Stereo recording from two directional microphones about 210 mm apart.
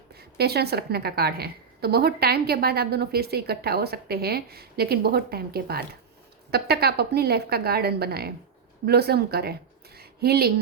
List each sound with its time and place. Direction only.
0.2 s a woman's voice: 50° right (ahead or behind)